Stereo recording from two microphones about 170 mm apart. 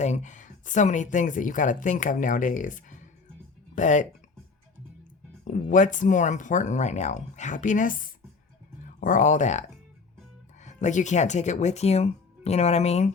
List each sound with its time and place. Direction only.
0.0 s speech: 45° left (ahead or behind)
5.5 s speech: 50° left (ahead or behind)